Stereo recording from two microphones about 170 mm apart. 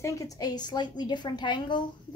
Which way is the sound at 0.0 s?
20° left (ahead or behind).